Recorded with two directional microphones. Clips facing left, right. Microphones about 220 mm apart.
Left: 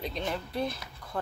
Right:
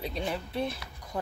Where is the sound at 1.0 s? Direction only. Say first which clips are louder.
Right 1 dB; 15° right (ahead or behind).